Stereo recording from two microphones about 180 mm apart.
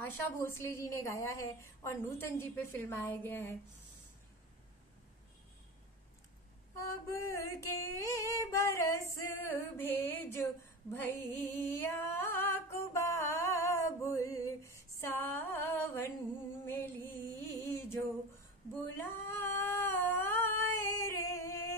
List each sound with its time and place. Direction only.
0.0 s a woman's voice: 15° left (ahead or behind)
6.8 s a woman's voice: 15° left (ahead or behind)
9.3 s a sound: 15° left (ahead or behind)
16.6 s music: 10° left (ahead or behind)
17.6 s a sound: 15° left (ahead or behind)
18.9 s cat: 15° left (ahead or behind)